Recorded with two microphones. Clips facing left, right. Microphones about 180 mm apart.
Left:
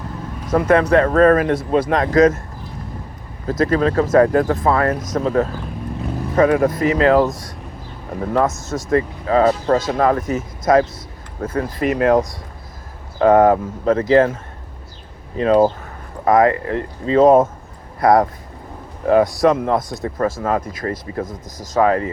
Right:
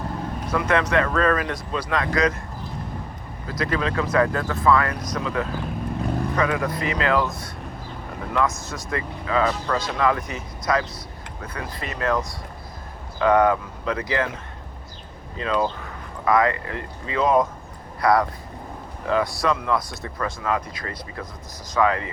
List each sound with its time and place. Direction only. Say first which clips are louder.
0.5 s speech: left 8 dB; 45° left (ahead or behind)
3.4 s speech: left 8 dB; 45° left (ahead or behind)
8.3 s speech: left 6 dB; 40° left (ahead or behind)
13.1 s speech: left 6 dB; 40° left (ahead or behind)
15.4 s speech: left 10 dB; 40° left (ahead or behind)